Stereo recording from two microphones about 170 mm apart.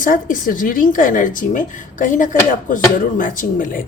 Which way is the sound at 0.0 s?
55° left (ahead or behind).